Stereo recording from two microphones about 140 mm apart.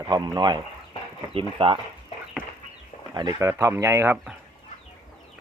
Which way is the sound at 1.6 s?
40° right (ahead or behind).